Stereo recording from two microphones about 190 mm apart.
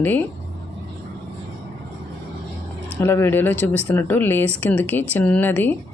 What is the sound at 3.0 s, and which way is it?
Speech, 10° left (ahead or behind).